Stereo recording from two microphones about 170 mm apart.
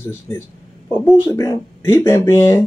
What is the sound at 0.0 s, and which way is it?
Speech, 15° left (ahead or behind).